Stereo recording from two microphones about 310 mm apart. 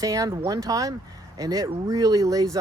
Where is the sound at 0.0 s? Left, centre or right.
Centre.